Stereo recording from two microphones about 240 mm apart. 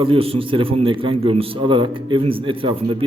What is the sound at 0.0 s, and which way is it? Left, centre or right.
A man's voice, right.